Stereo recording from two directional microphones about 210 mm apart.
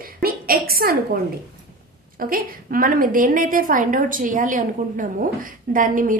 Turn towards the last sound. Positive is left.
turn(degrees=-40)  # may be behind; listen again after turning